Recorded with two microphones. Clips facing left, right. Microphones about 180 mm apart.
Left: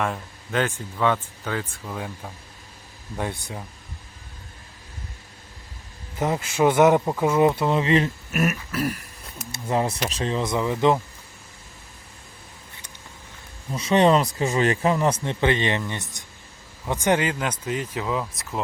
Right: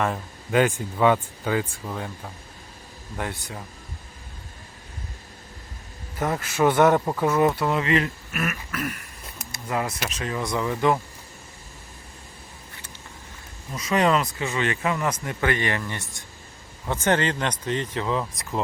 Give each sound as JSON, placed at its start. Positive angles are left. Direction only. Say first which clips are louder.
{"t": 0.0, "sound": "speech", "louder": "right 1 dB", "side_deg": 0}
{"t": 0.6, "sound": "speech", "louder": "right 3 dB", "side_deg": -15}
{"t": 3.2, "sound": "speech", "louder": "left 2 dB", "side_deg": 15}
{"t": 6.1, "sound": "speech", "louder": "left 1 dB", "side_deg": 15}
{"t": 8.3, "sound": "a sound", "louder": "left 5 dB", "side_deg": 45}
{"t": 9.5, "sound": "speech", "louder": "left 4 dB", "side_deg": 25}
{"t": 13.7, "sound": "speech", "louder": "left 4 dB", "side_deg": 30}